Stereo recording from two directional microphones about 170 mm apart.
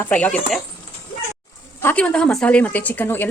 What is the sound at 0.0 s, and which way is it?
Speech, 10° left (ahead or behind).